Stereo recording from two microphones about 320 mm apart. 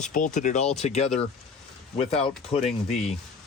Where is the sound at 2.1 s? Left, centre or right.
Centre.